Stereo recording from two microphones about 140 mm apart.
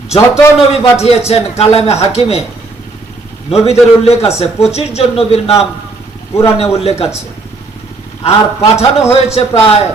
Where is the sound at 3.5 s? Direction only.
45° left (ahead or behind).